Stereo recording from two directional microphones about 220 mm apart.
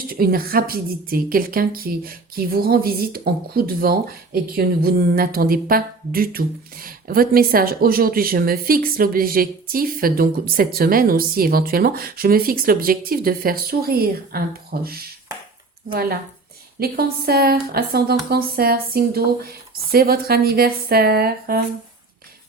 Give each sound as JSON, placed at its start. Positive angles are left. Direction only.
{"t": 0.1, "sound": "a woman's voice", "side_deg": -45}